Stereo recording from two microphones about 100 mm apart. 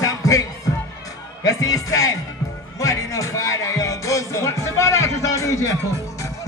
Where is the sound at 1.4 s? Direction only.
35° left (ahead or behind).